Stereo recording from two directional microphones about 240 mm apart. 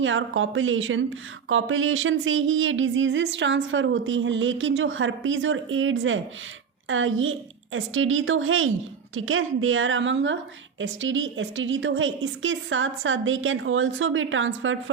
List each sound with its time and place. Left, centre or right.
0.0 s a woman's voice: right